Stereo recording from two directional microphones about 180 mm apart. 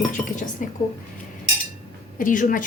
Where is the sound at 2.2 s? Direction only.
45° left (ahead or behind).